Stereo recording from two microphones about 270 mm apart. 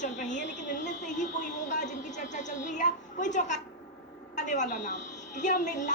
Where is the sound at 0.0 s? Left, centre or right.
Left.